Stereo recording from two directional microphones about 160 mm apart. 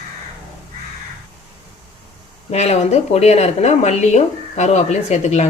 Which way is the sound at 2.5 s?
45° left (ahead or behind).